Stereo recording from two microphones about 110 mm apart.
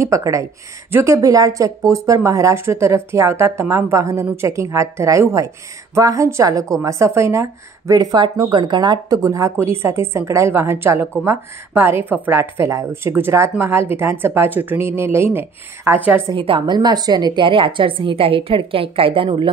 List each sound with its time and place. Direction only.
0.0 s a woman's voice: 30° right (ahead or behind)
16.3 s a woman's voice: 50° right (ahead or behind)